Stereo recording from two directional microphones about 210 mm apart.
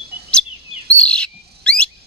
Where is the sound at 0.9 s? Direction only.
5° left (ahead or behind).